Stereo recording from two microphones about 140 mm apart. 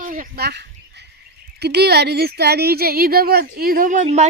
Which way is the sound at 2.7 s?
90° right.